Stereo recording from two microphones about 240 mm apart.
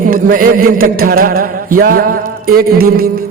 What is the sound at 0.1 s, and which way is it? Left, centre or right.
A man's voice, right.